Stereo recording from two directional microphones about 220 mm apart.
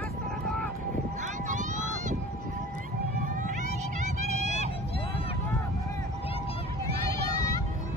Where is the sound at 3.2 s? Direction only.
35° right (ahead or behind).